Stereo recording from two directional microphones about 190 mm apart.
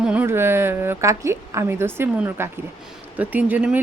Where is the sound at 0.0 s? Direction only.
5° right (ahead or behind).